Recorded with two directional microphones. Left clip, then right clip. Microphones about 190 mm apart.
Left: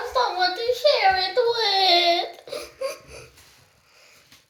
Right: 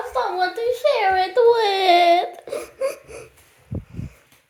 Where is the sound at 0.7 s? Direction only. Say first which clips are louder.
Even; 60° right (ahead or behind).